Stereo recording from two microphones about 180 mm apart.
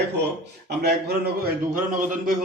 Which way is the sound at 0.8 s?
60° right (ahead or behind).